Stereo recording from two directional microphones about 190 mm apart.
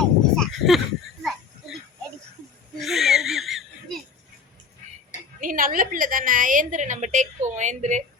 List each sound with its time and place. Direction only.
0.3 s a sound: centre (ahead or behind)
2.7 s laughter: centre (ahead or behind)
5.4 s a woman's voice: 45° right (ahead or behind)